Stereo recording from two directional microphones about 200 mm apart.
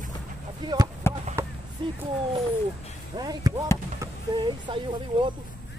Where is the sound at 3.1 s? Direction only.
20° right (ahead or behind).